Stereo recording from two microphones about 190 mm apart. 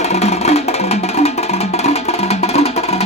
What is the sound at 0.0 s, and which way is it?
Music, 35° left (ahead or behind).